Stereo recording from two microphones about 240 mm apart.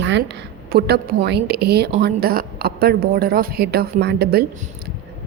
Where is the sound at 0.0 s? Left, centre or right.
Right.